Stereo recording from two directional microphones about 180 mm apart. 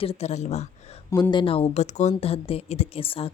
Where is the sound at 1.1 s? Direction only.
25° left (ahead or behind).